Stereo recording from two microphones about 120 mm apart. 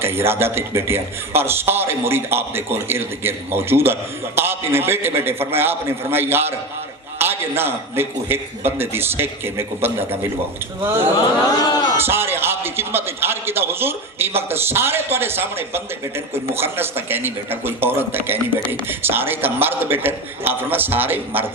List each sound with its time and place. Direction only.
0.0 s a man's voice: 20° right (ahead or behind)
11.4 s speech: 30° left (ahead or behind)
11.9 s a man's voice: 20° right (ahead or behind)